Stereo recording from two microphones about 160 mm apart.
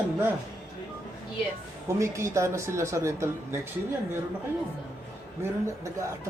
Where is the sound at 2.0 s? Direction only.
20° right (ahead or behind).